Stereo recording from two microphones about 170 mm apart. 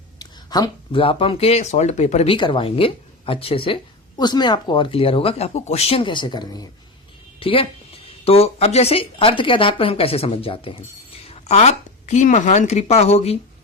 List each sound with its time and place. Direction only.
0.2 s a woman's voice: 25° left (ahead or behind); by 13.3 s 40° left (ahead or behind)